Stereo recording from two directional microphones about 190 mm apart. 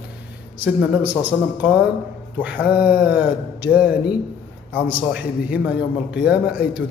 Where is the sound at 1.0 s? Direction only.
10° right (ahead or behind).